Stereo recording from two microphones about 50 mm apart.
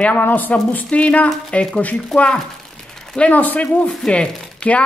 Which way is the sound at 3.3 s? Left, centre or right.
Left.